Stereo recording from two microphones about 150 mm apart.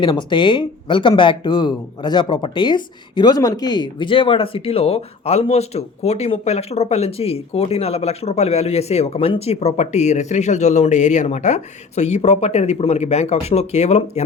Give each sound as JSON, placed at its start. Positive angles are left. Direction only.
{"t": 0.0, "sound": "speech", "side_deg": 30}